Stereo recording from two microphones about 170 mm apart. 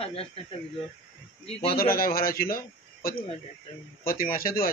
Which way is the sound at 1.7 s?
60° left (ahead or behind).